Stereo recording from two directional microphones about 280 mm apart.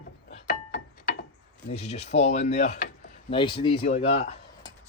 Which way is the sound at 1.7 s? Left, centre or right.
Left.